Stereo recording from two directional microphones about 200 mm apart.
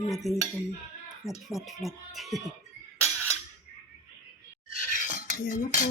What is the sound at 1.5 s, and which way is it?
A woman's voice, centre (ahead or behind).